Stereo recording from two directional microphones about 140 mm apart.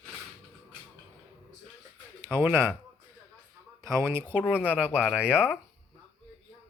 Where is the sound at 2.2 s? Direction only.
15° right (ahead or behind).